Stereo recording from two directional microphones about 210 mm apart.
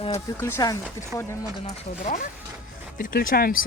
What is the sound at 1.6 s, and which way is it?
Speech, 35° left (ahead or behind).